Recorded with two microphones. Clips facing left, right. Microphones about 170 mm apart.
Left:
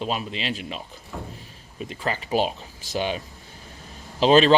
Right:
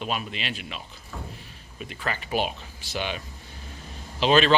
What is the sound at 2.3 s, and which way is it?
Speech, 35° left (ahead or behind).